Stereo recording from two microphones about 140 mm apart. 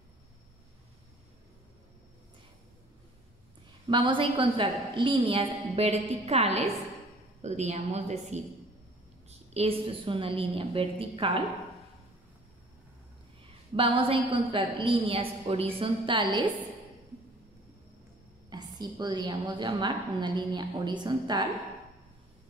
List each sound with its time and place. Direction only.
3.9 s a woman's voice: 35° right (ahead or behind); by 8.4 s 50° right (ahead or behind)
9.5 s a woman's voice: 45° right (ahead or behind)
13.7 s a woman's voice: 40° right (ahead or behind)
18.5 s a woman's voice: 30° right (ahead or behind)